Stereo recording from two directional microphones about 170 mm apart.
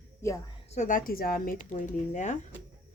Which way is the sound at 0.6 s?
45° left (ahead or behind).